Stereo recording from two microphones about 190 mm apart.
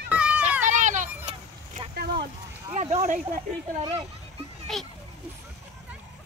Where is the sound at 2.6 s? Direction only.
35° right (ahead or behind).